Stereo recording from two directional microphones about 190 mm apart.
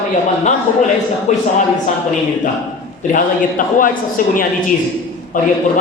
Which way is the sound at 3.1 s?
45° left (ahead or behind).